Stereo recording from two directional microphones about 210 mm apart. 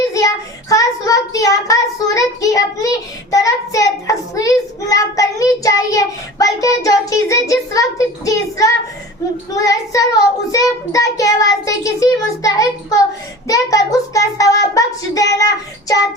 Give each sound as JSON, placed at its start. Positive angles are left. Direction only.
{"t": 0.7, "sound": "child singing", "side_deg": 15}